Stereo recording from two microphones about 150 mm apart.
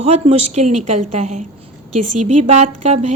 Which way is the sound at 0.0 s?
45° right (ahead or behind).